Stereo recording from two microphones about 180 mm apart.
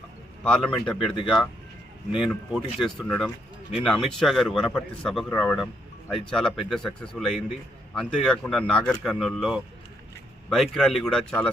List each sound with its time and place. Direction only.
0.4 s speech: 5° left (ahead or behind)
0.9 s speech: 30° left (ahead or behind)
2.1 s speech: 5° right (ahead or behind)